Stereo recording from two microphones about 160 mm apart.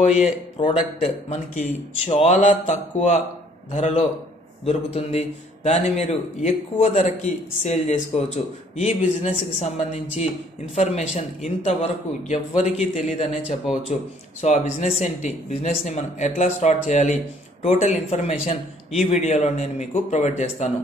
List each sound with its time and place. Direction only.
0.6 s speech: 30° left (ahead or behind)
2.0 s speech: 45° left (ahead or behind)